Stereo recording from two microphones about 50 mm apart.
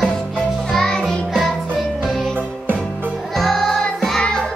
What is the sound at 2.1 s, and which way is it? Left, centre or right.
Music, centre.